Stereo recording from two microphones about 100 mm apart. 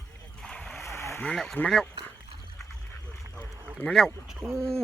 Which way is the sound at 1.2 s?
5° left (ahead or behind).